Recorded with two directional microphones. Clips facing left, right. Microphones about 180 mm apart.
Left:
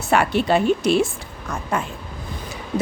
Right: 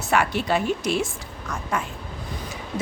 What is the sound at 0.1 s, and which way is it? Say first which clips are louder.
Speech: left 4 dB; 30° left (ahead or behind).